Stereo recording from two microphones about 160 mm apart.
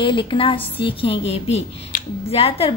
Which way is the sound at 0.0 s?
30° left (ahead or behind).